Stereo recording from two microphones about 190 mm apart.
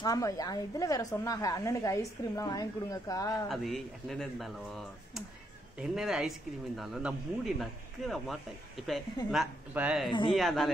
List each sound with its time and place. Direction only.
0.0 s a woman's voice: 20° left (ahead or behind)
3.4 s speech: centre (ahead or behind)